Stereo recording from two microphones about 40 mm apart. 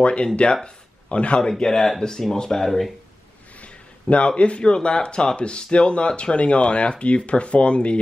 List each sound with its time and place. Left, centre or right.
0.0 s a man's voice: left
1.6 s speech: centre
3.6 s a sound: left
4.4 s speech: left